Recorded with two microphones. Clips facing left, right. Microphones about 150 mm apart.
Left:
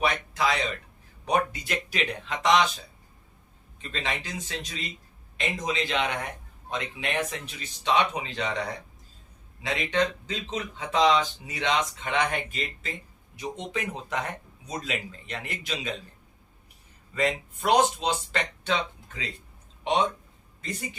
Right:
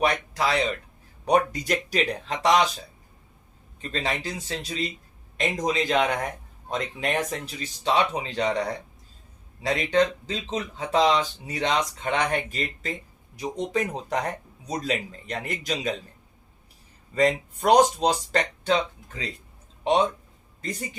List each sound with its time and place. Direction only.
0.0 s speech: 35° right (ahead or behind)
3.8 s speech: 35° right (ahead or behind)
9.6 s speech: 40° right (ahead or behind)
17.2 s a man's voice: 40° right (ahead or behind)